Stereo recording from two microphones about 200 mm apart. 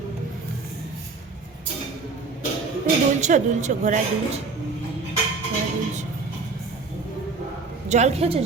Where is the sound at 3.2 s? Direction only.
35° right (ahead or behind).